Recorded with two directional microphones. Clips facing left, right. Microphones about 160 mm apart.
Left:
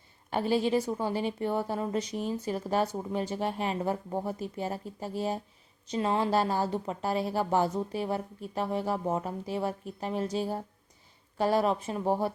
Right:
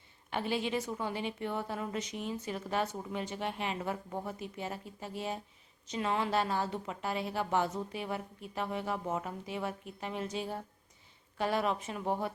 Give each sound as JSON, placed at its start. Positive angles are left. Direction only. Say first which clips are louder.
{"t": 0.3, "sound": "a woman's voice", "louder": "left 7 dB", "side_deg": 40}